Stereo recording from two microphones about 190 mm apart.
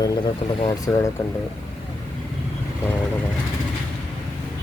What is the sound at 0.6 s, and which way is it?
Speech, 20° left (ahead or behind).